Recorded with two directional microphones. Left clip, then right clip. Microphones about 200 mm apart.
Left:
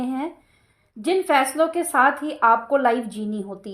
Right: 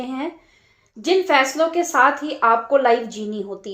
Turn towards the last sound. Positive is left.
turn(degrees=40)  # may be behind; listen again after turning